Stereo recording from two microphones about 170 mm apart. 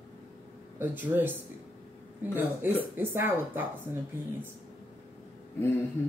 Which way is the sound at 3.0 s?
10° right (ahead or behind).